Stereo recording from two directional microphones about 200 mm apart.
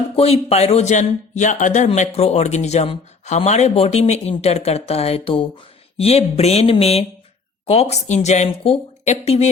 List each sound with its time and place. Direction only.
0.2 s a man's voice: 30° left (ahead or behind)